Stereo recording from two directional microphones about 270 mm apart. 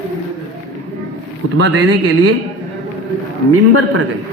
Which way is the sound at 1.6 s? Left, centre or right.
Right.